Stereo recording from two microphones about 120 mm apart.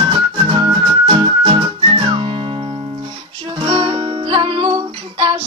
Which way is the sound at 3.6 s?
45° right (ahead or behind).